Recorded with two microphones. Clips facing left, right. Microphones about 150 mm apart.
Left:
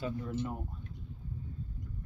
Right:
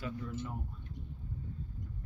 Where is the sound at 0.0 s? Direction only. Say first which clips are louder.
Left 4 dB; 30° left (ahead or behind).